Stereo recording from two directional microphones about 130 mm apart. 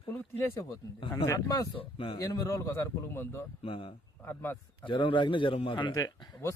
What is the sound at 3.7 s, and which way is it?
A man's voice, 45° left (ahead or behind).